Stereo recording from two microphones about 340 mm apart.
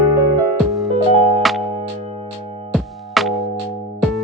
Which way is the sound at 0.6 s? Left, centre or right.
Centre.